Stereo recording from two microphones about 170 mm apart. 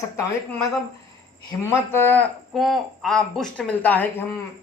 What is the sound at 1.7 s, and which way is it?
Speech, 15° left (ahead or behind).